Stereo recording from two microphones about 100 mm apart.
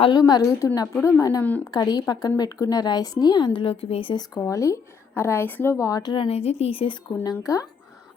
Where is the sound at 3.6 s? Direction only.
80° left.